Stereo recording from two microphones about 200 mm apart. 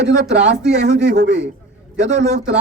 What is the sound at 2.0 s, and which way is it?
Speech, 40° right (ahead or behind).